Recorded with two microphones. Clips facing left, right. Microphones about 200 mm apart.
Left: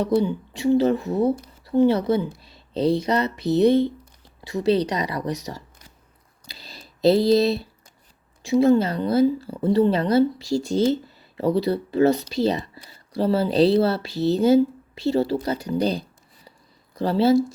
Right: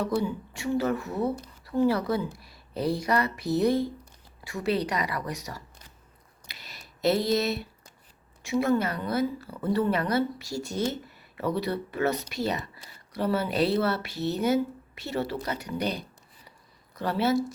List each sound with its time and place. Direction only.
0.0 s a woman's voice: 25° left (ahead or behind)
6.5 s a sound: 30° left (ahead or behind)
8.4 s speech: 30° left (ahead or behind)